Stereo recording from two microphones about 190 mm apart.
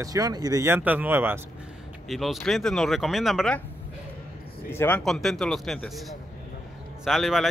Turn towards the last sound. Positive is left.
turn(degrees=0)  # may be behind; listen again after turning